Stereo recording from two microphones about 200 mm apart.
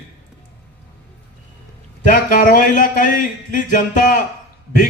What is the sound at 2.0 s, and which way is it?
Speech, 40° left (ahead or behind).